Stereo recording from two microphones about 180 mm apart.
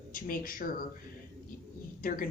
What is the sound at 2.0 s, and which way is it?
Speech, 50° left (ahead or behind).